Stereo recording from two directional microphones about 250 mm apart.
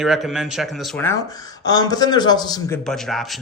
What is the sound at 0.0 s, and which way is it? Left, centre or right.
Speech, centre.